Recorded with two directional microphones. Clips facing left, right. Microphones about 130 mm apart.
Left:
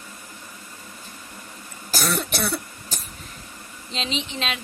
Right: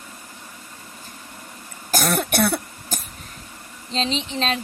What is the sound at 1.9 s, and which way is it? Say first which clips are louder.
Cough: right 4 dB; 50° right (ahead or behind).